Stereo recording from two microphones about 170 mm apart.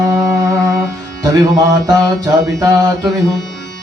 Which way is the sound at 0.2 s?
20° right (ahead or behind).